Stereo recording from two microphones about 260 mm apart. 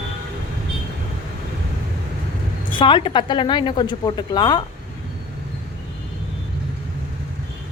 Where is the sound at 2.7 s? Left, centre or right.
Centre.